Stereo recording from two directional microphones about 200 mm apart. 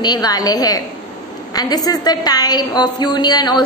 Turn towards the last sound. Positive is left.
turn(degrees=20)  # may be behind; listen again after turning